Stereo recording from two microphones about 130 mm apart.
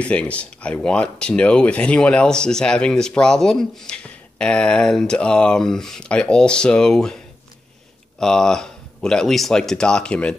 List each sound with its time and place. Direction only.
0.0 s speech: 10° left (ahead or behind)
8.2 s speech: 5° left (ahead or behind)